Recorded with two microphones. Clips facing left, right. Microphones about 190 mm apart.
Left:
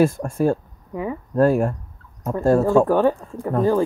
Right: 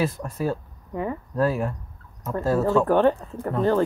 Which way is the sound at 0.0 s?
50° left (ahead or behind).